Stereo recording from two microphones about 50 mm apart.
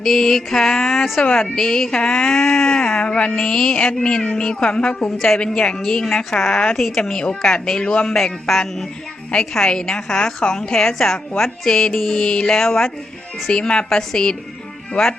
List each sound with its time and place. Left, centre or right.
0.0 s a woman's voice: centre
2.3 s speech: centre
3.3 s a woman's voice: centre
5.1 s a woman's voice: centre
8.1 s a woman's voice: centre